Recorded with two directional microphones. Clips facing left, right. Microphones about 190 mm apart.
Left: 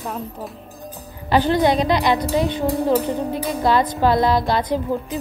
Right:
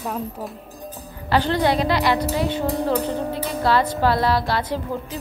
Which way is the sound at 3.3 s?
15° left (ahead or behind).